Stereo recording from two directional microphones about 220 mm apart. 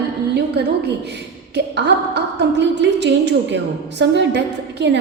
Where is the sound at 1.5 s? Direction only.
50° right (ahead or behind).